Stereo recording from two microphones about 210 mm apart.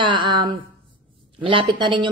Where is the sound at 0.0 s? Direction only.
20° right (ahead or behind).